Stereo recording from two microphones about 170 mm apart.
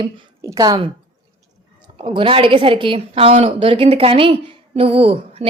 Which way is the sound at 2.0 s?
30° right (ahead or behind).